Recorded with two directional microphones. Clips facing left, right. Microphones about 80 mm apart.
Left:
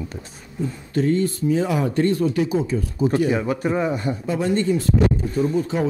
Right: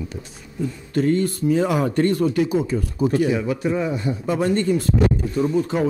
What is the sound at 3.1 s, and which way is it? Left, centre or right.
Speech, left.